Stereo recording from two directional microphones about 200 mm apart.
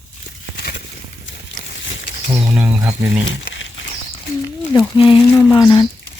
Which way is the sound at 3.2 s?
70° left (ahead or behind).